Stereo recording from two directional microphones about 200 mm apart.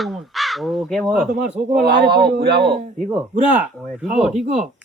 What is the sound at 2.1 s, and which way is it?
Speech, 50° right (ahead or behind).